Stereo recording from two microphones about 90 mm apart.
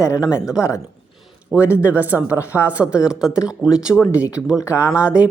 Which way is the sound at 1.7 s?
15° right (ahead or behind).